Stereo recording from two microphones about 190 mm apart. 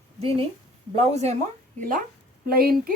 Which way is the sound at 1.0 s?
35° right (ahead or behind).